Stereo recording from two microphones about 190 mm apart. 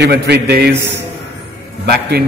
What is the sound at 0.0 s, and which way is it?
A man's voice, 60° right (ahead or behind).